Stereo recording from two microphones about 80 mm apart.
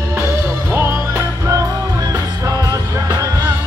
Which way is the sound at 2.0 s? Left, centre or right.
Right.